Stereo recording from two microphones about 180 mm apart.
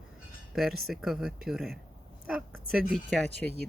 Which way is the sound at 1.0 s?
Centre (ahead or behind).